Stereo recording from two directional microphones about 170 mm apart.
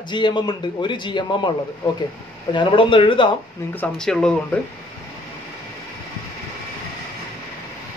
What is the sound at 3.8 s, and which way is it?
Speech, 5° left (ahead or behind).